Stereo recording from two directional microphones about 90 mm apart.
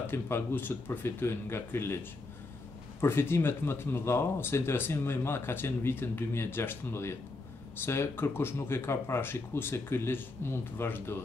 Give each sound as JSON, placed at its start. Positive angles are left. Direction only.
{"t": 0.0, "sound": "speech", "side_deg": 25}
{"t": 3.0, "sound": "speech", "side_deg": 25}